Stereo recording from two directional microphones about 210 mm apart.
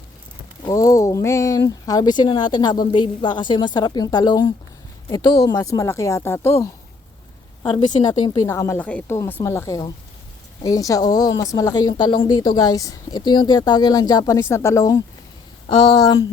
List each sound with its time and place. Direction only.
0.6 s a woman's voice: 15° left (ahead or behind)
8.3 s a woman's voice: 15° left (ahead or behind)